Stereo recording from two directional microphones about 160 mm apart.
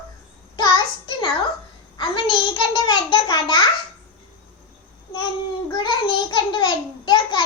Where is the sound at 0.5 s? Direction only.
30° left (ahead or behind).